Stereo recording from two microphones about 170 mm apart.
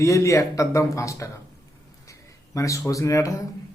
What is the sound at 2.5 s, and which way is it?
Speech, 20° left (ahead or behind).